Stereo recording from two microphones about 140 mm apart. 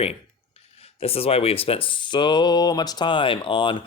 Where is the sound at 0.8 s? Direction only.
45° left (ahead or behind).